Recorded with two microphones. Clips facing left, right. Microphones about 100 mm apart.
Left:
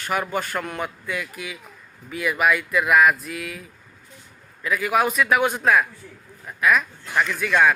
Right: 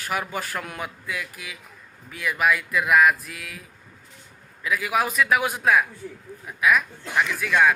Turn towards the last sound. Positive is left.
turn(degrees=0)  # may be behind; listen again after turning